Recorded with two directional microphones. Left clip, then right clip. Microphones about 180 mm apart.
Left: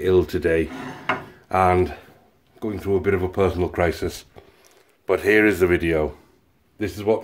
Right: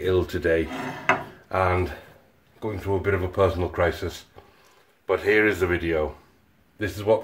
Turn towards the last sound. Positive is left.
turn(degrees=30)  # may be behind; listen again after turning